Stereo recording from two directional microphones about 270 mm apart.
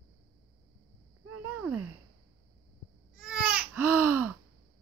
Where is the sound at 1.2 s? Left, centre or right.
Right.